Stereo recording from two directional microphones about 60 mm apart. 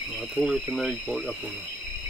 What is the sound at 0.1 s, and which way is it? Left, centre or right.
Speech, centre.